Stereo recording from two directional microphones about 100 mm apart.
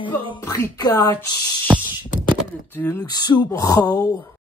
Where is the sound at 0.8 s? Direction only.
35° left (ahead or behind).